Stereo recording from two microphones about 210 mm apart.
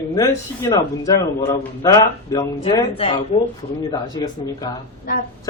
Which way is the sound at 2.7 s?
25° left (ahead or behind).